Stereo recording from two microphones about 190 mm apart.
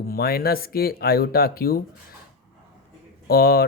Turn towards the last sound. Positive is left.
turn(degrees=55)  # may be behind; listen again after turning